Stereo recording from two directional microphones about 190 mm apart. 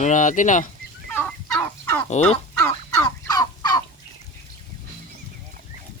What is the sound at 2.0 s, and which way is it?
Speech, 35° left (ahead or behind).